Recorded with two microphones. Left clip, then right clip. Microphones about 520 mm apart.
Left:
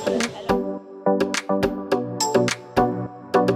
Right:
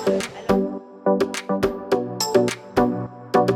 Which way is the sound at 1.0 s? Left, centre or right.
Centre.